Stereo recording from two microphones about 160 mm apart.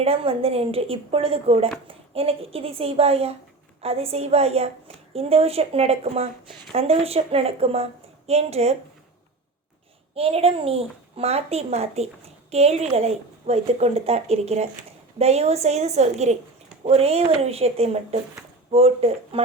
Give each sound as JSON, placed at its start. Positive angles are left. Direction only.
{"t": 0.0, "sound": "speech", "side_deg": -35}
{"t": 10.2, "sound": "a woman's voice", "side_deg": -40}